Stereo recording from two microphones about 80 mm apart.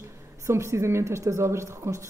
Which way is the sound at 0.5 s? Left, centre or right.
Right.